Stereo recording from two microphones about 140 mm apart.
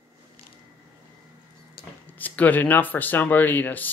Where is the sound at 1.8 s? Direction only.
90° left.